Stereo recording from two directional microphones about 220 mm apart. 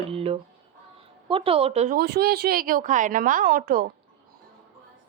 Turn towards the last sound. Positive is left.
turn(degrees=-45)  # may be behind; listen again after turning